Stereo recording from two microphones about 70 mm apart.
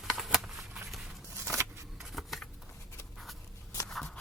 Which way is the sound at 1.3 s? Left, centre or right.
Right.